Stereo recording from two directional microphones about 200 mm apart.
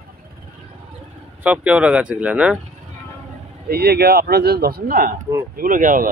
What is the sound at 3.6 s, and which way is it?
Speech, 50° right (ahead or behind).